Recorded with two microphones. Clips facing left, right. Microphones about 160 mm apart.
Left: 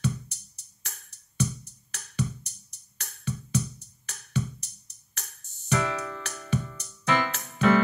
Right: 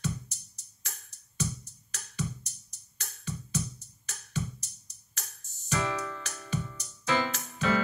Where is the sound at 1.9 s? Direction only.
60° left (ahead or behind).